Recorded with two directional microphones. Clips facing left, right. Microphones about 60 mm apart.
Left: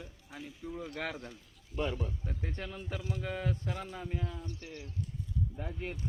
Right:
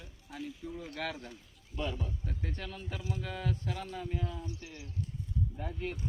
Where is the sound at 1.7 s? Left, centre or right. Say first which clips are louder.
Left 2 dB; left.